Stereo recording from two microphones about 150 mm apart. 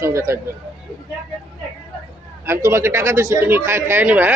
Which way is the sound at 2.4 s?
15° right (ahead or behind).